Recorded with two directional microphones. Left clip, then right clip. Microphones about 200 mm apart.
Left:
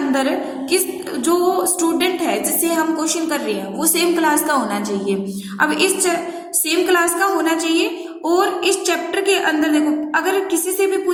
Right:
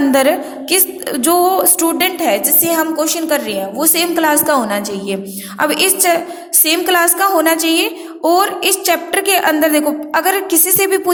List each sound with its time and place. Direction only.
0.1 s a woman's voice: 45° right (ahead or behind)